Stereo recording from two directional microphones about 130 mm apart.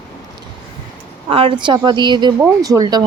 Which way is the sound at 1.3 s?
45° right (ahead or behind).